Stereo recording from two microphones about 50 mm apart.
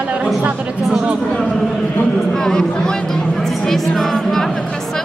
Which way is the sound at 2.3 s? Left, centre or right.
Centre.